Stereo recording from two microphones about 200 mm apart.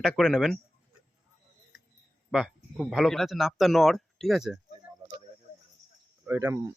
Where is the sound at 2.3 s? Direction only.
Centre (ahead or behind).